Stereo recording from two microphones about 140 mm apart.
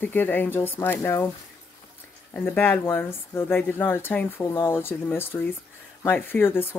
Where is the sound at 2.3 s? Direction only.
10° left (ahead or behind).